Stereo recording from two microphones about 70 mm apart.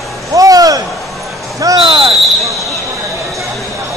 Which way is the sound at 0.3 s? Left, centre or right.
Right.